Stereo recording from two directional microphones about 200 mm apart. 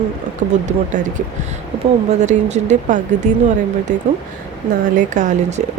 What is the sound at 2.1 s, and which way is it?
Speech, 35° right (ahead or behind).